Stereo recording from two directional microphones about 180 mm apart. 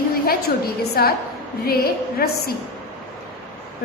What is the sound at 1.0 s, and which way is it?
A woman's voice, 55° left (ahead or behind).